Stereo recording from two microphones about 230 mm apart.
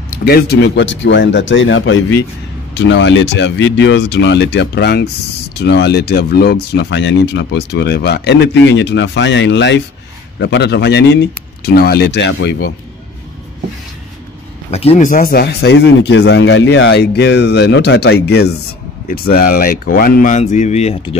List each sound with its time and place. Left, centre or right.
0.2 s speech: left
14.7 s speech: left